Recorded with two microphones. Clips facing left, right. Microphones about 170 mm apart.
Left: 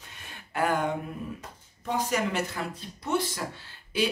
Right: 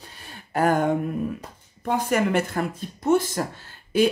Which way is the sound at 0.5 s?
45° right (ahead or behind).